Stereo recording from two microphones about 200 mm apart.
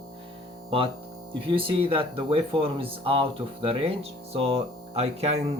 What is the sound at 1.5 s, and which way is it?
Speech, 25° right (ahead or behind).